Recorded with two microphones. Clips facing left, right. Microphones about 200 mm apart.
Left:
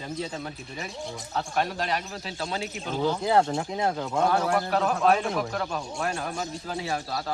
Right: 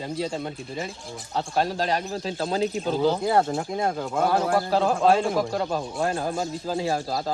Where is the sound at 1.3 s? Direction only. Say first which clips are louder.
Right 3 dB; 30° right (ahead or behind).